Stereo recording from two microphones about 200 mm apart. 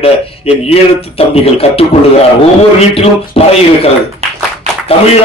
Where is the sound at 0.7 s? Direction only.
30° left (ahead or behind).